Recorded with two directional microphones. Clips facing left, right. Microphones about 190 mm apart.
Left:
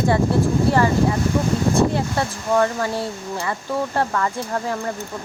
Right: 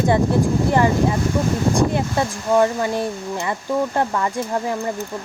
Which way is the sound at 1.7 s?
15° right (ahead or behind).